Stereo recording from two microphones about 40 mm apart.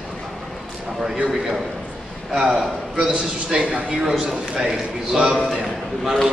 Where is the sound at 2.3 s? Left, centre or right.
Right.